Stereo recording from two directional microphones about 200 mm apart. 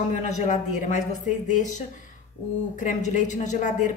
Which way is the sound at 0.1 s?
40° left (ahead or behind).